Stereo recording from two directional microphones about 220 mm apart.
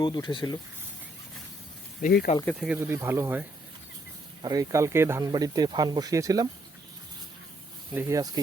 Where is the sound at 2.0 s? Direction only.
45° left (ahead or behind).